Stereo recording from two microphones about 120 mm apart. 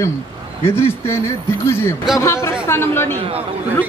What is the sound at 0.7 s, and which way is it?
A man's voice, 20° left (ahead or behind).